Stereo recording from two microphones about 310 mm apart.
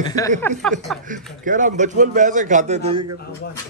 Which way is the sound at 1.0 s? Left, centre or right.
Right.